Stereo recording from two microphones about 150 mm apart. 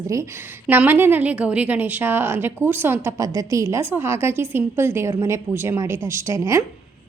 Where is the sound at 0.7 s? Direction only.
15° right (ahead or behind).